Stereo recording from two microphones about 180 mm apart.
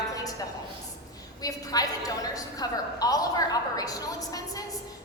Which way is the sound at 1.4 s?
20° left (ahead or behind).